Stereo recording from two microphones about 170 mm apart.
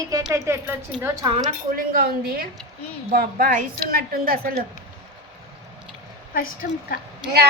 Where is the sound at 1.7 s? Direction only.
55° right (ahead or behind).